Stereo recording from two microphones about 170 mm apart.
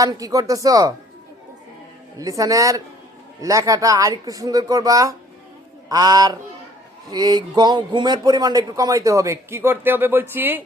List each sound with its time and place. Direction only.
0.0 s speech: 20° right (ahead or behind)
2.1 s speech: 20° right (ahead or behind)